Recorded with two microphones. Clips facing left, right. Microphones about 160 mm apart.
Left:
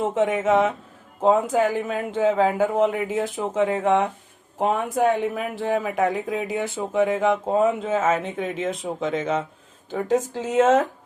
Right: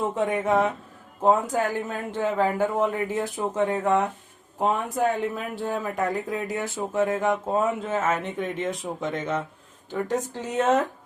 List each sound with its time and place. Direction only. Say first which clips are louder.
0.0 s a man's voice: left 3 dB; 90° left